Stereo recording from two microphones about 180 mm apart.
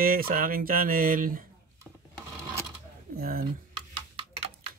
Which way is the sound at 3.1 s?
55° right (ahead or behind).